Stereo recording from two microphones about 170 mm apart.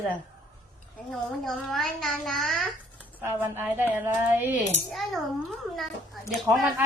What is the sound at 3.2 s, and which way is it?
A woman's voice, 10° right (ahead or behind).